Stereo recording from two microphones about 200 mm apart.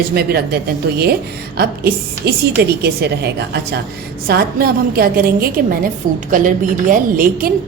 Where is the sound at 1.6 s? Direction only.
50° right (ahead or behind).